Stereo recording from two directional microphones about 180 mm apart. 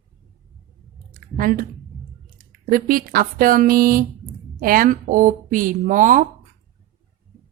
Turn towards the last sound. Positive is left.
turn(degrees=-45)  # may be behind; listen again after turning